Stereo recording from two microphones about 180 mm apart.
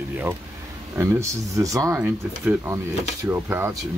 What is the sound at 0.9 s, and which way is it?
Speech, 15° right (ahead or behind).